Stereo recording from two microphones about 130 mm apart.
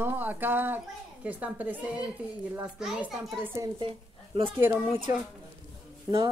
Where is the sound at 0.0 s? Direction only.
15° right (ahead or behind).